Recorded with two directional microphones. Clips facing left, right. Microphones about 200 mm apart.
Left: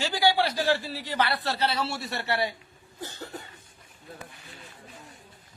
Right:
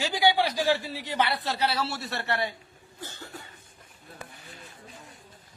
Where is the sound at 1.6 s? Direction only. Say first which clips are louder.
Right 1 dB; 5° right (ahead or behind).